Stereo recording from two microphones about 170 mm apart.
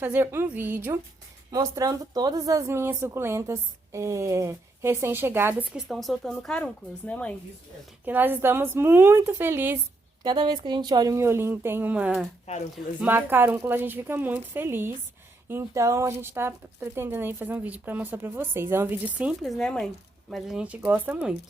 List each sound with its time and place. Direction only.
0.0 s a woman's voice: 10° right (ahead or behind)
5.7 s speech: centre (ahead or behind)
8.0 s a woman's voice: 10° right (ahead or behind)
10.2 s a woman's voice: 30° right (ahead or behind); by 19.3 s 10° right (ahead or behind)
19.4 s speech: centre (ahead or behind)